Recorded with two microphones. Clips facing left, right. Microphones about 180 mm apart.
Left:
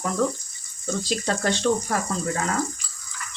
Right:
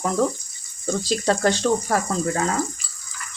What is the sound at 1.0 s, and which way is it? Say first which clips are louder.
Speech: right 5 dB; 40° right (ahead or behind).